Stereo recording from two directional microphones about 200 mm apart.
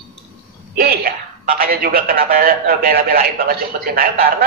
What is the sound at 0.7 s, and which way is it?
A man's voice, 50° right (ahead or behind).